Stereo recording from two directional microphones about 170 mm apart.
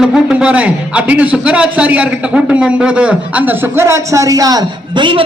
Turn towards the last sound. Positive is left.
turn(degrees=-30)  # may be behind; listen again after turning